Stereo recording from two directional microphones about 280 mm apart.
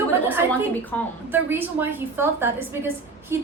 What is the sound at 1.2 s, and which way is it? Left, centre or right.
A woman's voice, centre.